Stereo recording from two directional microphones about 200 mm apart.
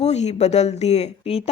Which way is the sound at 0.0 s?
35° left (ahead or behind).